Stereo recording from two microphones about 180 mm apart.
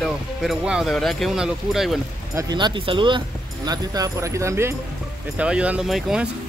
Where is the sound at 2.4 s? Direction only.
25° right (ahead or behind); by 6.3 s 5° right (ahead or behind).